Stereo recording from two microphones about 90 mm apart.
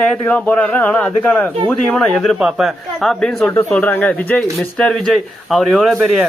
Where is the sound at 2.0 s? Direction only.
5° left (ahead or behind).